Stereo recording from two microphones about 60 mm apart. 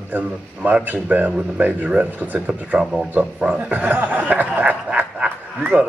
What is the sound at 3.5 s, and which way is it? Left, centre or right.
Speech, right.